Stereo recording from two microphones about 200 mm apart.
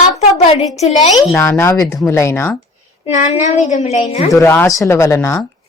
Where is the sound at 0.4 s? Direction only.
35° left (ahead or behind).